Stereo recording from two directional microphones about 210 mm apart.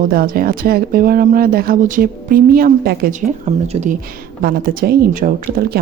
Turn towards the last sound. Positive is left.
turn(degrees=-45)  # may be behind; listen again after turning